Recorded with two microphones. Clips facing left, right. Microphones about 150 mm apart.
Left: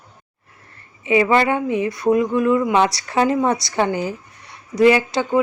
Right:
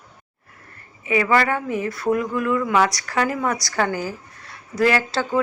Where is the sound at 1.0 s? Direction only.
25° left (ahead or behind).